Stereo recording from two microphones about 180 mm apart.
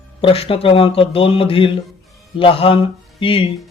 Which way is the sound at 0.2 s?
30° left (ahead or behind).